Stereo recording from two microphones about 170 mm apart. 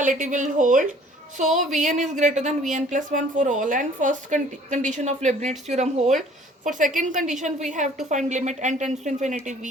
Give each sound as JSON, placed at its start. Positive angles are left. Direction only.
{"t": 0.0, "sound": "a woman's voice", "side_deg": -50}